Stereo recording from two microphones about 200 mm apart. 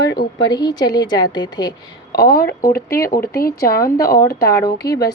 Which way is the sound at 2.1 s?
50° left (ahead or behind).